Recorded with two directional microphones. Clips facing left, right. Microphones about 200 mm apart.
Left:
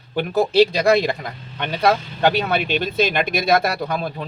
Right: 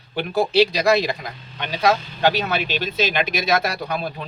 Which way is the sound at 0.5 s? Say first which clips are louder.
Left 2 dB; 50° left (ahead or behind).